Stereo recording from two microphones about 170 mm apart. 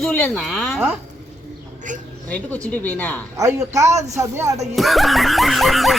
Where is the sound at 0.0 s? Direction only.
5° left (ahead or behind).